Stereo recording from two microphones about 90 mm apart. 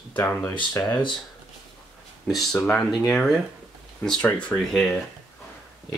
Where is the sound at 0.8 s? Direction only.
45° left (ahead or behind).